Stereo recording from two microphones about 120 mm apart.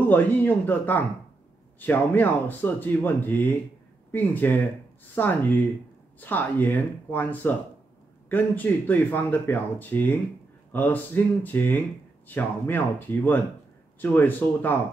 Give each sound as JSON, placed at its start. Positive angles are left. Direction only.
{"t": 0.1, "sound": "a man's voice", "side_deg": 15}